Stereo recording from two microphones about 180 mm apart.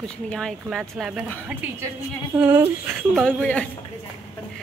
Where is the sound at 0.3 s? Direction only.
5° left (ahead or behind).